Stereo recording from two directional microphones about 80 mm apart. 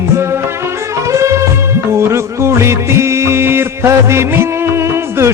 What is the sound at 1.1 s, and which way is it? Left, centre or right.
Music, right.